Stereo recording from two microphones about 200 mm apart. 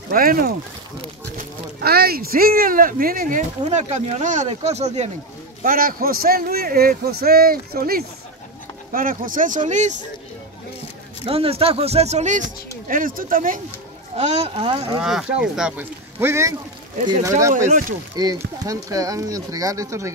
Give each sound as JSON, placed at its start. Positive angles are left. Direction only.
{"t": 0.1, "sound": "a man's voice", "side_deg": -45}
{"t": 5.6, "sound": "a man's voice", "side_deg": -45}
{"t": 11.2, "sound": "speech", "side_deg": -30}
{"t": 14.1, "sound": "speech", "side_deg": -30}
{"t": 15.0, "sound": "speech", "side_deg": -5}